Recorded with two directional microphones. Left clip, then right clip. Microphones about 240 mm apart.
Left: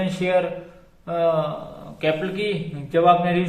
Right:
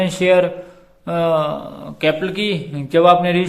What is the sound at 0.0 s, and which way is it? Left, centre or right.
A man's voice, right.